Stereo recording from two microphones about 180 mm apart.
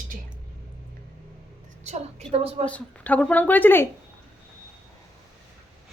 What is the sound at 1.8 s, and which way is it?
Speech, 40° right (ahead or behind).